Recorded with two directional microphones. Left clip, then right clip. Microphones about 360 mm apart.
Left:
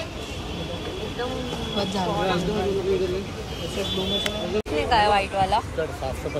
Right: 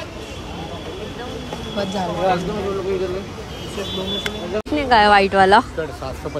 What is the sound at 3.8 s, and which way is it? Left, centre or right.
Speech, centre.